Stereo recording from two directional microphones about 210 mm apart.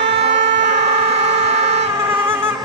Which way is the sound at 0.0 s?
55° right (ahead or behind).